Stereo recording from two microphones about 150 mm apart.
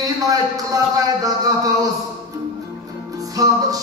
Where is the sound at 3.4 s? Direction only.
25° right (ahead or behind).